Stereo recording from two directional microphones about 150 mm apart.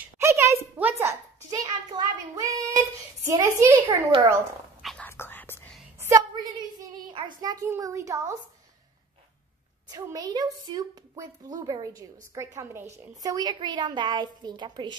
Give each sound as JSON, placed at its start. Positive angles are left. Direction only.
{"t": 0.2, "sound": "a child's voice", "side_deg": -20}
{"t": 4.8, "sound": "whispering", "side_deg": 5}
{"t": 5.9, "sound": "a sound", "side_deg": -20}
{"t": 7.1, "sound": "a woman's voice", "side_deg": -30}
{"t": 9.8, "sound": "a woman's voice", "side_deg": -25}